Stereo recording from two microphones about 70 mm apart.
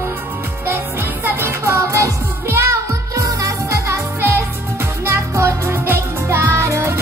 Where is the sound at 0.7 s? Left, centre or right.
Right.